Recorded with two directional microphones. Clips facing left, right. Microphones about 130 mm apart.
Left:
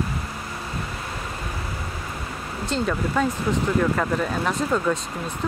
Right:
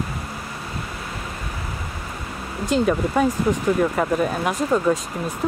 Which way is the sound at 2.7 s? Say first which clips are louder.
Right 5 dB; 15° right (ahead or behind).